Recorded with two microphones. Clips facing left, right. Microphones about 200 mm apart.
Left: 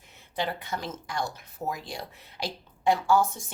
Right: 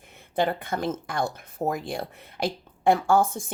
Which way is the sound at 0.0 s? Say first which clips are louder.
Right 7 dB; 55° right (ahead or behind).